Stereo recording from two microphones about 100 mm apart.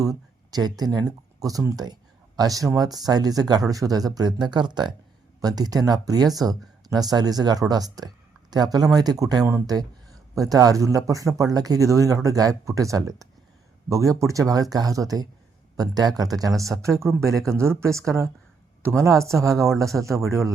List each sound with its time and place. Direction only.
0.0 s speech: 40° right (ahead or behind)
1.7 s a sound: 40° right (ahead or behind)
2.7 s speech: 40° right (ahead or behind)